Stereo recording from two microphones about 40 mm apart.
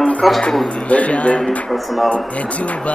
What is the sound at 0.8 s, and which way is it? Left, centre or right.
Music, left.